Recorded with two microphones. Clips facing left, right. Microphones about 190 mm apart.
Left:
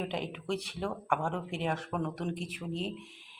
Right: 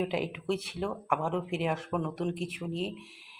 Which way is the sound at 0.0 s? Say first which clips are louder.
Right 4 dB; 5° right (ahead or behind).